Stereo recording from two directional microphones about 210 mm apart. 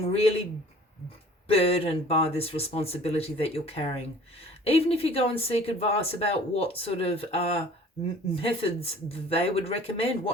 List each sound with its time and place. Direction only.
0.0 s speech: 30° left (ahead or behind)
1.5 s speech: 25° left (ahead or behind)